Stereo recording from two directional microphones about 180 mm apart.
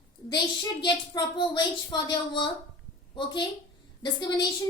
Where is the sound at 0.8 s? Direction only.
25° left (ahead or behind).